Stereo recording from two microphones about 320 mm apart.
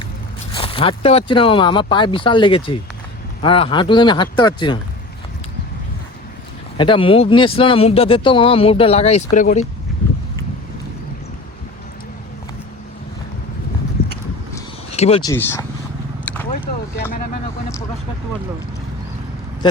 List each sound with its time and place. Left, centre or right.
0.5 s speech: centre
6.7 s speech: centre
14.9 s speech: centre
16.2 s vehicle: centre
19.6 s speech: centre